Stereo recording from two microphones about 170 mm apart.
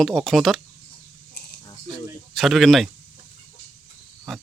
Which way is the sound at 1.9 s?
Centre (ahead or behind).